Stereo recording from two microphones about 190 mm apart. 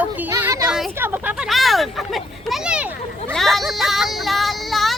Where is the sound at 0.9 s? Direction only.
10° right (ahead or behind).